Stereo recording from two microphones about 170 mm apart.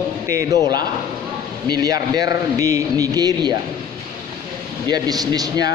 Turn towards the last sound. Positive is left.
turn(degrees=-20)  # may be behind; listen again after turning